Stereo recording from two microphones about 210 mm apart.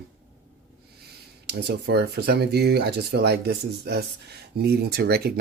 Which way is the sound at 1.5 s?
50° right (ahead or behind).